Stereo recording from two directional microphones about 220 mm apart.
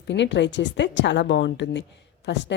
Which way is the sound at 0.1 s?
55° left (ahead or behind).